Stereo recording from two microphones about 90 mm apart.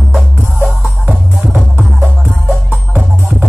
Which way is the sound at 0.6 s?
20° right (ahead or behind).